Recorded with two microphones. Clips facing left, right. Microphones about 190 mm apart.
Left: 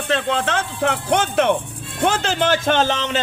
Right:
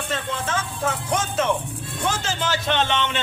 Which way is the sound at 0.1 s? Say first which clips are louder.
Left 8 dB; 75° left (ahead or behind).